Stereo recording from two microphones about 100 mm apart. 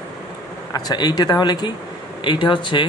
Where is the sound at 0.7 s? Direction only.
40° left (ahead or behind).